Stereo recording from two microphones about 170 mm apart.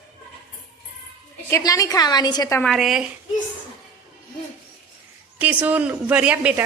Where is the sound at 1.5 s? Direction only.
20° left (ahead or behind).